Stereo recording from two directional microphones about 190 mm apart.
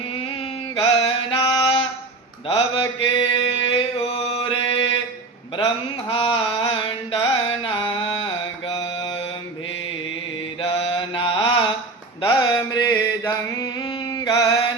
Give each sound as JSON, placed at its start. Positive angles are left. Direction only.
{"t": 0.8, "sound": "mantra", "side_deg": 30}
{"t": 10.6, "sound": "mantra", "side_deg": 30}